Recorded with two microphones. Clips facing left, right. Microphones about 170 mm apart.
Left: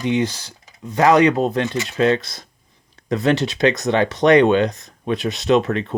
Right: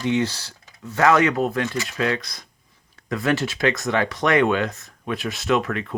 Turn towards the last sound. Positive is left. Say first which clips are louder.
# left 5 dB
turn(degrees=25)  # may be behind; listen again after turning